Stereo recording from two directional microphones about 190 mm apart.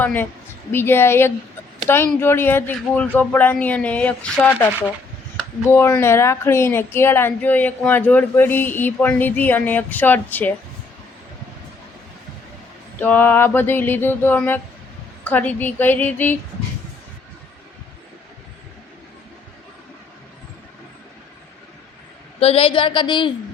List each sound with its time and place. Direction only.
0.0 s speech: 10° left (ahead or behind)
5.6 s speech: 15° left (ahead or behind)
13.0 s speech: 10° left (ahead or behind)
22.4 s a woman's voice: 30° left (ahead or behind)